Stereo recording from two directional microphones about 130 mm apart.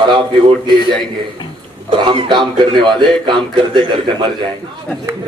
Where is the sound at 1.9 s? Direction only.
40° right (ahead or behind).